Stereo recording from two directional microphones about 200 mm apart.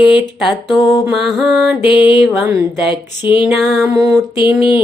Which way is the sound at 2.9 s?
25° left (ahead or behind).